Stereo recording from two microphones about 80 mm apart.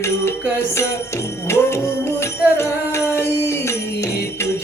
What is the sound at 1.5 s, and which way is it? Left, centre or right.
Music, left.